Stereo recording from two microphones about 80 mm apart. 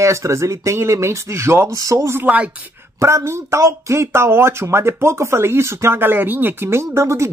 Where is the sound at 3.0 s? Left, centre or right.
Right.